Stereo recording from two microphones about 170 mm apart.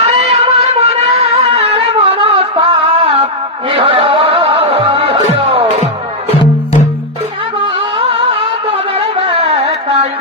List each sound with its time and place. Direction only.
0.0 s music: 40° right (ahead or behind)
7.9 s music: 35° right (ahead or behind)